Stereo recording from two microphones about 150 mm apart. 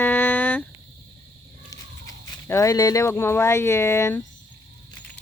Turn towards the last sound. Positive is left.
turn(degrees=15)  # may be behind; listen again after turning